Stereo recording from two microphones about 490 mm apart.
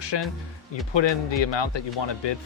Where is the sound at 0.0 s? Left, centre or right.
Left.